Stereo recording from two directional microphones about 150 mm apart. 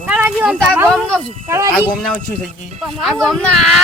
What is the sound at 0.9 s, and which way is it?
Speech, centre (ahead or behind).